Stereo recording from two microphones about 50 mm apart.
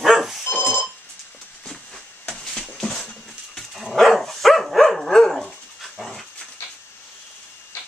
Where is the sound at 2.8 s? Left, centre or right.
Centre.